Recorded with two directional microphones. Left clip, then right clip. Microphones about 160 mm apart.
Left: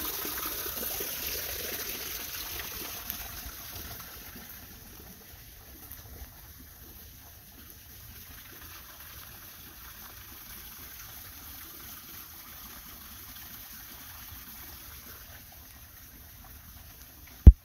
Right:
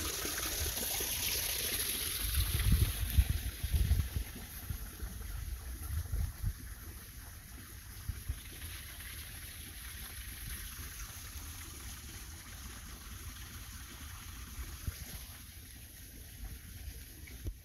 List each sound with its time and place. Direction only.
0.0 s water: 70° left (ahead or behind); by 4.5 s 30° left (ahead or behind)
10.5 s water: 65° left (ahead or behind); by 12.2 s 90° left
13.3 s a sound: 90° left